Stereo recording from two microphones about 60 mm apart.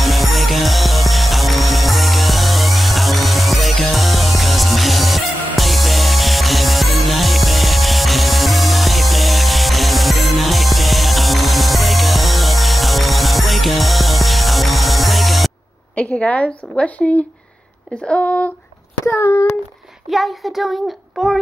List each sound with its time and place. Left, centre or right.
0.0 s music: centre
16.0 s a woman's voice: centre
19.0 s a sound: left
20.1 s a child's voice: centre